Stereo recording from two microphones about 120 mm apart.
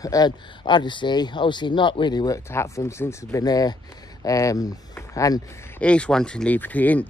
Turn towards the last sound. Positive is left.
turn(degrees=15)  # may be behind; listen again after turning